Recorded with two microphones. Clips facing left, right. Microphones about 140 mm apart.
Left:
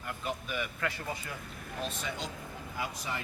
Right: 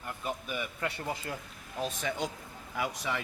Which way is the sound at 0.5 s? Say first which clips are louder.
Even; 20° right (ahead or behind).